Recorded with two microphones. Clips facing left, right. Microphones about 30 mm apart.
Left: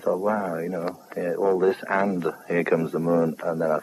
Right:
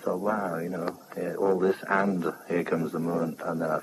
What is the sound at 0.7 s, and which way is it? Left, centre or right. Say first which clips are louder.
A man's voice: left 3 dB; left.